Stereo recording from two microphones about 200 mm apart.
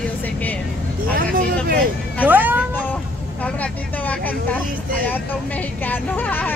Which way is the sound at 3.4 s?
5° left (ahead or behind).